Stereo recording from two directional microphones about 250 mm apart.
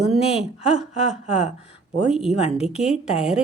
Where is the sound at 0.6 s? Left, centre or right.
Centre.